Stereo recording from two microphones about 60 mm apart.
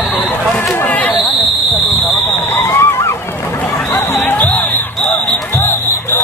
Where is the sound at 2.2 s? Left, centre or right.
Left.